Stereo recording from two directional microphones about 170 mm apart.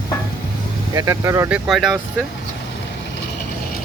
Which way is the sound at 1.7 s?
Centre (ahead or behind).